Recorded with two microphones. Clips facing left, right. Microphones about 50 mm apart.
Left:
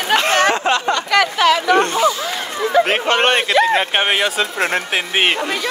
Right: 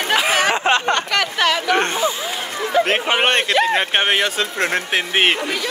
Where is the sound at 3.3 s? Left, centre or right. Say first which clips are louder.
Left 2 dB; centre.